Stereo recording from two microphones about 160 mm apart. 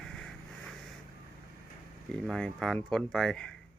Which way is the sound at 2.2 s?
5° left (ahead or behind).